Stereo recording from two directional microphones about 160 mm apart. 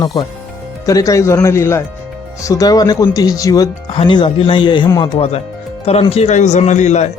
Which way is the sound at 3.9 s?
35° left (ahead or behind).